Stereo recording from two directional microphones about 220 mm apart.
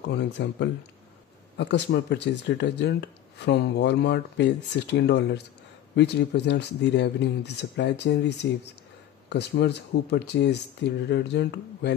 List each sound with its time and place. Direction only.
0.1 s speech: 50° left (ahead or behind)